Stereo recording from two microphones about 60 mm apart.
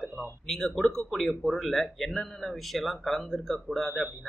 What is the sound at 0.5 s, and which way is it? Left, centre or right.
Speech, centre.